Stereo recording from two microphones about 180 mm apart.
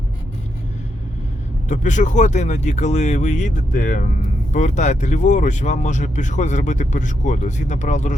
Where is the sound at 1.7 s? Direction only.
45° left (ahead or behind).